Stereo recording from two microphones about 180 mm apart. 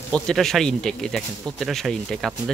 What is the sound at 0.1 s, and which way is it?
Speech, 5° left (ahead or behind).